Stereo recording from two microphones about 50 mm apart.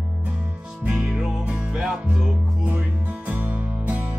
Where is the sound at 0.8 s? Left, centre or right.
Right.